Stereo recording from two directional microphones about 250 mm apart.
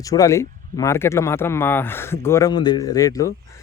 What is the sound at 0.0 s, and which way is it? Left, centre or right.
Speech, centre.